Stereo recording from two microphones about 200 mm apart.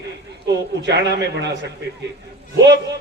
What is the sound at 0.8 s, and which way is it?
Speech, 55° right (ahead or behind).